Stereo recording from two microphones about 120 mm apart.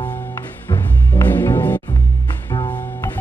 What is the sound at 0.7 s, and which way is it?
Music, 20° left (ahead or behind).